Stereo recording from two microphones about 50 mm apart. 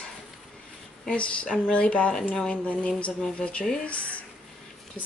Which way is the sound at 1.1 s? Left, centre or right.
Left.